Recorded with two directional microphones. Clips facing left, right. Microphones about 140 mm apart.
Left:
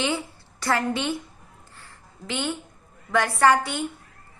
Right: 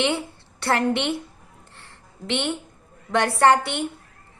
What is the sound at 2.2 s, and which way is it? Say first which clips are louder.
A woman's voice: right 3 dB; 25° right (ahead or behind).